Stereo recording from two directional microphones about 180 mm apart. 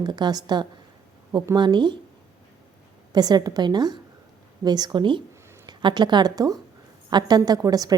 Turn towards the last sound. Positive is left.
turn(degrees=-20)  # may be behind; listen again after turning